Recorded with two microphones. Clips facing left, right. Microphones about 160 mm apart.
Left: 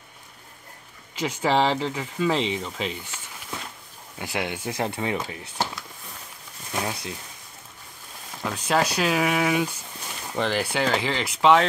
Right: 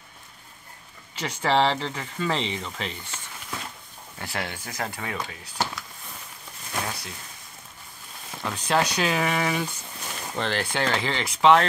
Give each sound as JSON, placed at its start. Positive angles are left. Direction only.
{"t": 1.2, "sound": "speech", "side_deg": 10}
{"t": 4.2, "sound": "speech", "side_deg": 15}
{"t": 4.7, "sound": "speech", "side_deg": 25}
{"t": 6.7, "sound": "a sound", "side_deg": 20}
{"t": 8.5, "sound": "speech", "side_deg": 5}